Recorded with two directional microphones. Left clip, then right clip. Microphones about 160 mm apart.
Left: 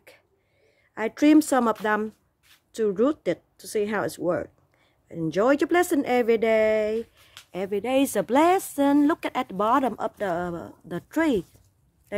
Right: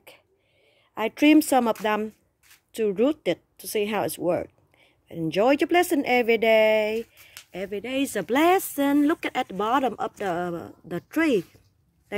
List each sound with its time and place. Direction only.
0.9 s a woman's voice: 5° right (ahead or behind)
7.5 s speech: 25° left (ahead or behind)
8.3 s speech: centre (ahead or behind)